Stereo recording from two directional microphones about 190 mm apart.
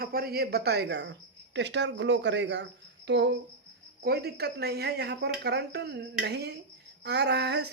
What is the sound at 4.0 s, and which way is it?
A man's voice, 55° right (ahead or behind).